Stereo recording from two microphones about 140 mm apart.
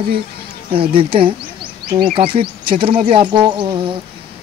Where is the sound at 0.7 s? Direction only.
40° right (ahead or behind).